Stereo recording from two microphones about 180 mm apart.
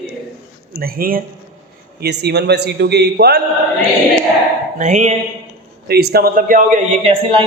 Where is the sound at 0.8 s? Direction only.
55° right (ahead or behind).